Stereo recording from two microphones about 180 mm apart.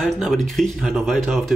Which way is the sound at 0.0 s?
Centre (ahead or behind).